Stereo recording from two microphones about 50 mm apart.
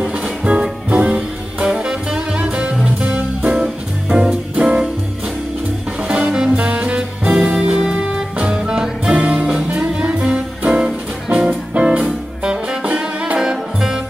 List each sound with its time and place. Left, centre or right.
0.0 s music: centre
6.0 s music: centre